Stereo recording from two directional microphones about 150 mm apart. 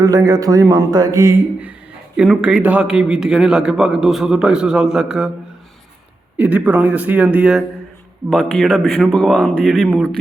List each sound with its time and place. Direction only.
0.0 s a man's voice: 25° right (ahead or behind)
2.1 s a man's voice: 5° right (ahead or behind)
6.3 s a man's voice: 10° right (ahead or behind)